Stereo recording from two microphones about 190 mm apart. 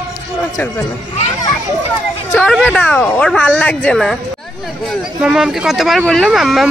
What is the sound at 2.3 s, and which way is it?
Speech, 5° left (ahead or behind).